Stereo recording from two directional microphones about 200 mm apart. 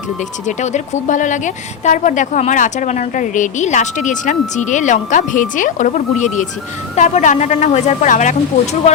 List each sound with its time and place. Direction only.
0.4 s a woman's voice: 35° left (ahead or behind)